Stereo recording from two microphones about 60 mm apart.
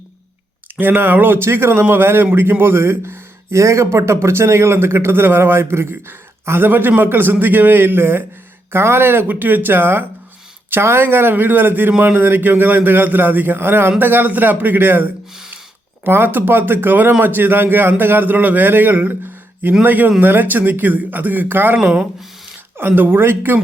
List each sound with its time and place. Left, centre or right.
0.8 s speech: right
21.8 s speech: centre
22.9 s speech: right